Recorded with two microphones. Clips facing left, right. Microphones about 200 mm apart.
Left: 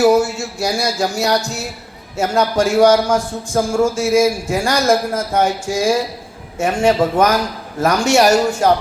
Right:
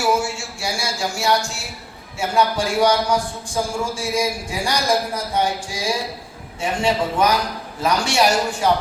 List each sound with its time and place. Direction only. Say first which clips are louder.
0.0 s music: left 8 dB; 40° left (ahead or behind)
2.1 s a man's voice: left 4 dB; 45° left (ahead or behind)